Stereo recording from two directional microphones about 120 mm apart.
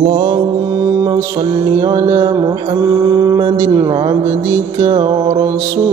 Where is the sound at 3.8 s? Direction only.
40° right (ahead or behind).